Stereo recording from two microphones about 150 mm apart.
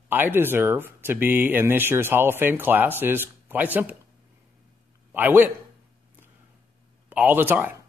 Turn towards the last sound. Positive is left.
turn(degrees=-15)  # may be behind; listen again after turning